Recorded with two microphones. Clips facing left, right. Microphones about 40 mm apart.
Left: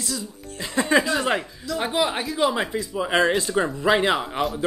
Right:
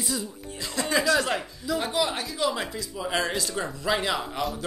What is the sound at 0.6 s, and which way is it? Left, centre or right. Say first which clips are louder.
Speech: left 6 dB; left.